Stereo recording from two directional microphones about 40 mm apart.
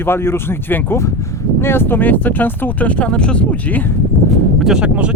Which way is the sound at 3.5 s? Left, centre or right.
Left.